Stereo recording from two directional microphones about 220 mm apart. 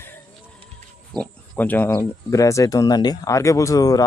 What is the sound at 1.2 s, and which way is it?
Speech, 10° left (ahead or behind).